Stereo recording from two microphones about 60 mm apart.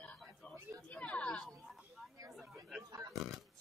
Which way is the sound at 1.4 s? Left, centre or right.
Centre.